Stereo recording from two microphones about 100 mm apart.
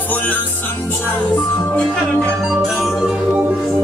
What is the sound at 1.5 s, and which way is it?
Music, 15° left (ahead or behind).